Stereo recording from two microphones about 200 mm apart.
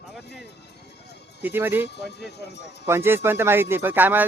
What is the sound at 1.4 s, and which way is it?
Speech, 10° right (ahead or behind).